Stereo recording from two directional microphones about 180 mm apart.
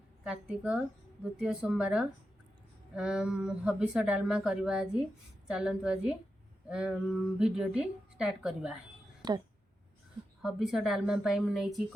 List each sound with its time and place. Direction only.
0.3 s a woman's voice: 5° right (ahead or behind)
9.2 s speech: 20° right (ahead or behind)
10.4 s a woman's voice: centre (ahead or behind)